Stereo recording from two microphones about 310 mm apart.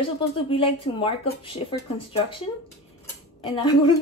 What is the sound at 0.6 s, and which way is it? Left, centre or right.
A woman's voice, centre.